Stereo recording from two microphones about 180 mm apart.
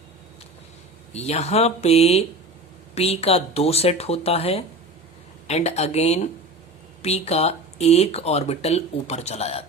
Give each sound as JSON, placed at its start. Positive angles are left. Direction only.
{"t": 1.1, "sound": "speech", "side_deg": 35}